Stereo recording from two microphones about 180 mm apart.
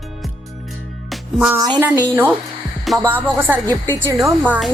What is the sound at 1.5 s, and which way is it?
Speech, 15° right (ahead or behind).